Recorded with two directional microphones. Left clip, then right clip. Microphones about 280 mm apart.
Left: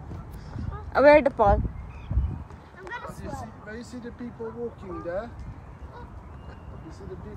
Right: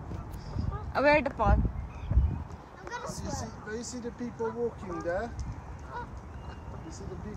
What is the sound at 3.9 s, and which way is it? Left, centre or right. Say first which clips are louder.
Speech: right 1 dB; right.